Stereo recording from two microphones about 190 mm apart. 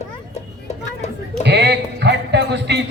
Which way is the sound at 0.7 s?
35° left (ahead or behind).